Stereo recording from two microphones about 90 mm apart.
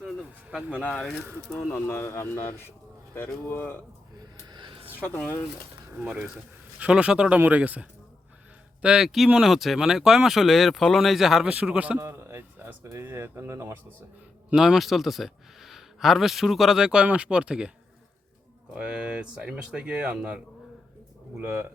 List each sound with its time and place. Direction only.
0.7 s speech: 10° right (ahead or behind)
1.7 s speech: 25° left (ahead or behind)
4.2 s a sound: 55° right (ahead or behind)
4.9 s speech: 20° left (ahead or behind)
6.3 s speech: 10° right (ahead or behind)
11.9 s speech: 30° right (ahead or behind)
14.5 s speech: 5° right (ahead or behind)
18.7 s speech: 10° right (ahead or behind)